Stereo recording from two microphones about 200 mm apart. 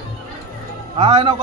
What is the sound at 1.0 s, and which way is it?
Speech, 30° right (ahead or behind).